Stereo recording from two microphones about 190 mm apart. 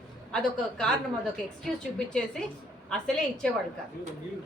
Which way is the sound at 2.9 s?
5° left (ahead or behind).